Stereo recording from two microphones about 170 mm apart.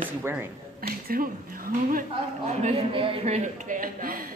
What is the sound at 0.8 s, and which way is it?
A woman's voice, 60° right (ahead or behind).